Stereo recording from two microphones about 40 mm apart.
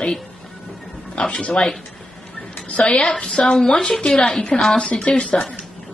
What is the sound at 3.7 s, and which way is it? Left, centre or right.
A woman's voice, left.